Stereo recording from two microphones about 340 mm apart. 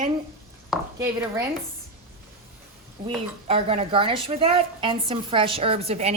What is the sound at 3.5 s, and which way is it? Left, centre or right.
A woman's voice, centre.